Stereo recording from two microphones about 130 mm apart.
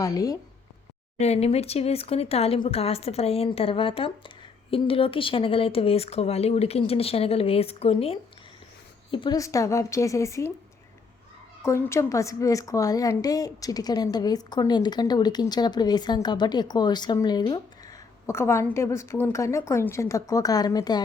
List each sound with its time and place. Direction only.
0.0 s a woman's voice: 30° left (ahead or behind)
1.2 s a woman's voice: 55° left (ahead or behind); by 9.4 s 40° left (ahead or behind)
9.4 s a woman's voice: 25° left (ahead or behind)
11.6 s a woman's voice: 20° left (ahead or behind)